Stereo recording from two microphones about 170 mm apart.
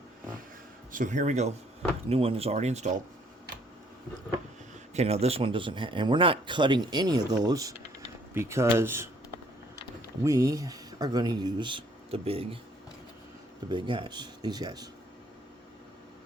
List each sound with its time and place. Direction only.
0.9 s speech: 50° right (ahead or behind)
4.9 s speech: 35° right (ahead or behind); by 9.0 s 15° right (ahead or behind)
10.2 s speech: 20° right (ahead or behind); by 12.5 s 35° right (ahead or behind)
13.7 s speech: 25° right (ahead or behind)